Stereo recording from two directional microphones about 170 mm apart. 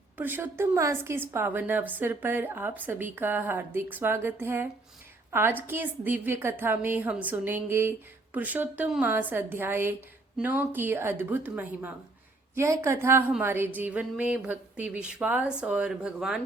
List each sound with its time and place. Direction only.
0.2 s a woman's voice: 10° right (ahead or behind)